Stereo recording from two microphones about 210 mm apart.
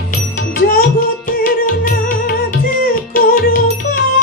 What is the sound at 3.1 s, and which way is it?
Music, 45° left (ahead or behind).